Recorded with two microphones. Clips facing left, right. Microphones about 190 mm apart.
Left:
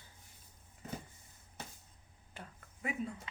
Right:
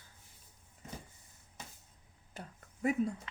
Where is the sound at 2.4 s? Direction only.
40° right (ahead or behind).